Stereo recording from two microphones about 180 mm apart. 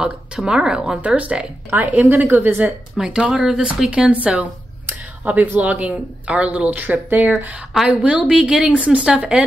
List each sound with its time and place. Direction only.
0.0 s speech: 5° right (ahead or behind)